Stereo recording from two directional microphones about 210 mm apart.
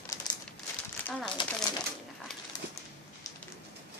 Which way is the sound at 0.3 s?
15° left (ahead or behind).